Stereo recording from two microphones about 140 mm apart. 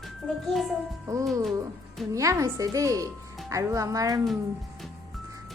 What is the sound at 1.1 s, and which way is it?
Speech, 25° right (ahead or behind).